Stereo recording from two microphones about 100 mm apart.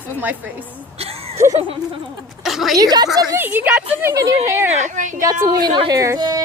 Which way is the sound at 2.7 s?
40° right (ahead or behind).